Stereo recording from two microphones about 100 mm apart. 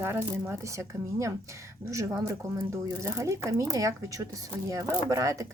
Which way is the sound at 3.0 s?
30° right (ahead or behind).